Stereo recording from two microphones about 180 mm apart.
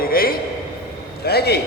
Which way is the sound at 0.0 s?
55° left (ahead or behind).